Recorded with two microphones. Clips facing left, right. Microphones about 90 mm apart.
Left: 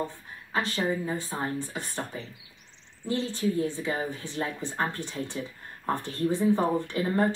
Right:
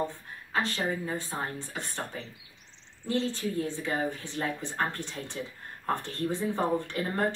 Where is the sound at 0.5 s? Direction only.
15° left (ahead or behind).